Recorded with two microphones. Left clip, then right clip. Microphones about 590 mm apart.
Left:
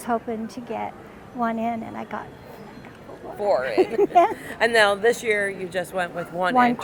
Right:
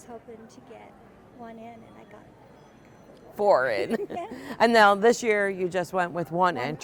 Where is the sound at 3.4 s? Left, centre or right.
Right.